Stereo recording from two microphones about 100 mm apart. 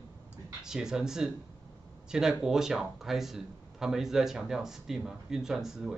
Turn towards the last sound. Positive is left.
turn(degrees=-5)  # may be behind; listen again after turning